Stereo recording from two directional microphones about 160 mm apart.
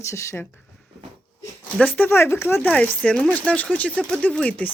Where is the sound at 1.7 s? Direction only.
10° left (ahead or behind).